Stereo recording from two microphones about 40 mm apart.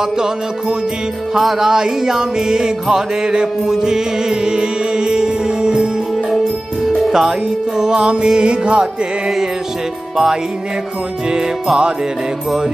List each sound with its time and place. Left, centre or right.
1.3 s music: centre
7.1 s music: centre; by 8.8 s right